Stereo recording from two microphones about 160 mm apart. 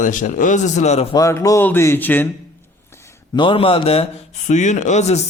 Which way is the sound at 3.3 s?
30° left (ahead or behind).